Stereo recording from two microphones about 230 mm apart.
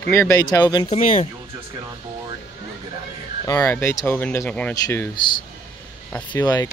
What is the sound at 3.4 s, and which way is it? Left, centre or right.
Speech, centre.